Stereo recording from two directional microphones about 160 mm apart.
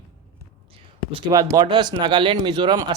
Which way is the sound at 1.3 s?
25° right (ahead or behind).